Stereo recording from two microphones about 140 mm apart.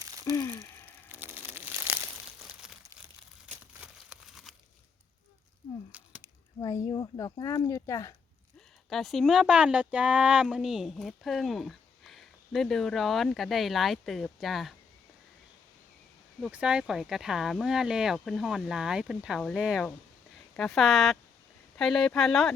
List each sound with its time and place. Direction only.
0.3 s a sound: 20° left (ahead or behind)
1.0 s crumpling: 15° right (ahead or behind)
3.7 s crumpling: 5° right (ahead or behind)
6.6 s speech: 30° left (ahead or behind)
8.9 s speech: centre (ahead or behind)
16.4 s speech: 5° right (ahead or behind)